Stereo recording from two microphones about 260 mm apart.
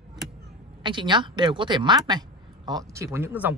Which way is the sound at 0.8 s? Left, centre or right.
Centre.